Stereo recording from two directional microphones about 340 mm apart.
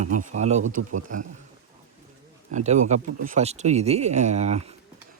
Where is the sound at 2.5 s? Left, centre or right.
Right.